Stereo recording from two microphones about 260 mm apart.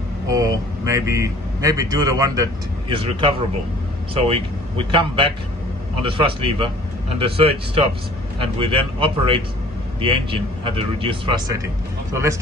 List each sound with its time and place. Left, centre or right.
0.3 s speech: centre
4.7 s speech: centre